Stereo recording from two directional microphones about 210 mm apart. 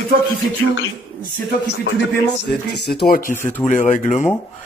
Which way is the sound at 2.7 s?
50° left (ahead or behind).